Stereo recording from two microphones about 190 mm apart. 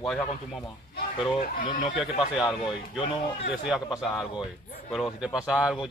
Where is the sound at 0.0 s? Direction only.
Centre (ahead or behind).